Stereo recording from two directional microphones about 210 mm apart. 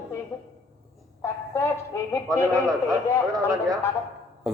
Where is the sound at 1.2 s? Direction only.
10° left (ahead or behind).